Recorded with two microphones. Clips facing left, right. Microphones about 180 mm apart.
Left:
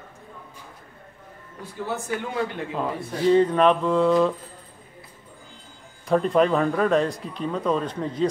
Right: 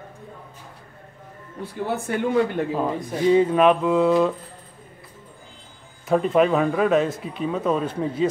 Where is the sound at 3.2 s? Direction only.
10° right (ahead or behind).